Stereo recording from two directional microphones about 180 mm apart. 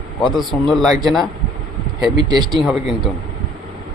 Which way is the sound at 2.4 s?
25° right (ahead or behind).